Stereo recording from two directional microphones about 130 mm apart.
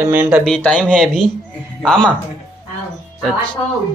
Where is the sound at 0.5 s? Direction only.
10° left (ahead or behind).